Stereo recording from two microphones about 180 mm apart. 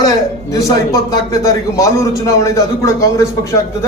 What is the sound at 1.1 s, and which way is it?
A man's voice, 20° left (ahead or behind).